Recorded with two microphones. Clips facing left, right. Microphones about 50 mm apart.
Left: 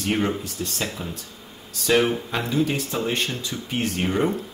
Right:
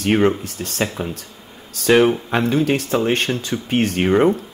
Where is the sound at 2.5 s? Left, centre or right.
Right.